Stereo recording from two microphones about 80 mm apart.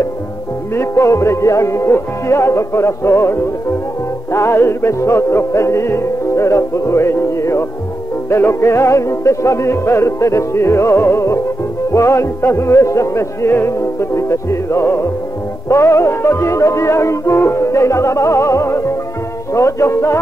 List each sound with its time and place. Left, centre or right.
0.7 s music: left